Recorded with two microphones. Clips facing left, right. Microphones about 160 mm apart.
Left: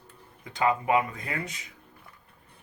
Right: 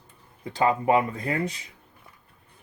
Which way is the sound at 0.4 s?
30° right (ahead or behind).